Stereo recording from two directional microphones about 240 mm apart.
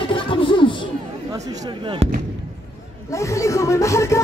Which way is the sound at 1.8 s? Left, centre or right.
Right.